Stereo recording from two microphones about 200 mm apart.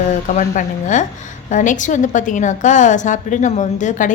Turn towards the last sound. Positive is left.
turn(degrees=40)  # may be behind; listen again after turning